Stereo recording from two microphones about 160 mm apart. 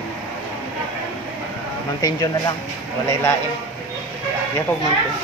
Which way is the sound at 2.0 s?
20° left (ahead or behind).